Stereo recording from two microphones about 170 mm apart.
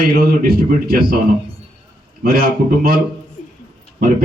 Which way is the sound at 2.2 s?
55° right (ahead or behind).